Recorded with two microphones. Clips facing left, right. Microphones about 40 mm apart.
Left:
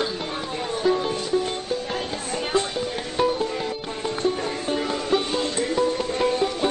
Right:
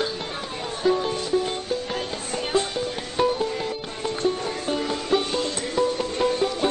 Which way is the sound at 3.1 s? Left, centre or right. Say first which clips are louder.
Even; centre.